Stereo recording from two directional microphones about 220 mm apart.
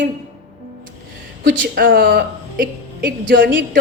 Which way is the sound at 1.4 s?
45° right (ahead or behind).